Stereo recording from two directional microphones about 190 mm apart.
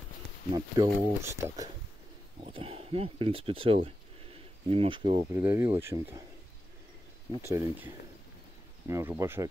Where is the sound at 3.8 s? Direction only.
30° right (ahead or behind).